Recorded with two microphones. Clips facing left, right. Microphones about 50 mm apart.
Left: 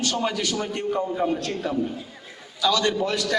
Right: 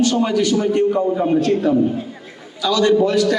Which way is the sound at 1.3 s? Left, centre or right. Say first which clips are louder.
Right 10 dB; right.